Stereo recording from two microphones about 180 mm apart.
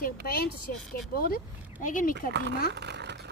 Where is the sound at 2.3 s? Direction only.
70° right (ahead or behind).